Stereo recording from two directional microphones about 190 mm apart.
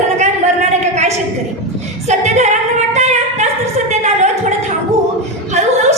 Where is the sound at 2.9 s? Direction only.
35° right (ahead or behind).